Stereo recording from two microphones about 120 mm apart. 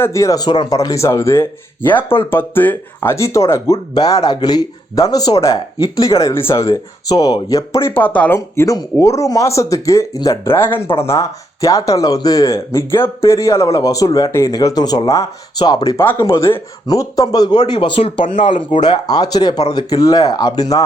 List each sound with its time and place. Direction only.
0.0 s speech: 25° left (ahead or behind)
8.4 s speech: 25° left (ahead or behind)
15.5 s speech: 40° left (ahead or behind)
16.2 s speech: 25° left (ahead or behind)
17.7 s speech: 45° left (ahead or behind); by 20.8 s 30° left (ahead or behind)